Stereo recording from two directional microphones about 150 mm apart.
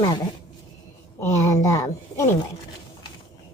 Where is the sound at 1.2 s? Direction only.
15° left (ahead or behind).